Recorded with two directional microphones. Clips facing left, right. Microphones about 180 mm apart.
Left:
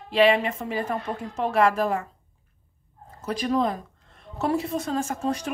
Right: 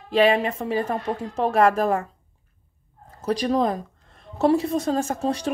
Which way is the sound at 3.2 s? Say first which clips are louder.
Right 3 dB; 35° right (ahead or behind).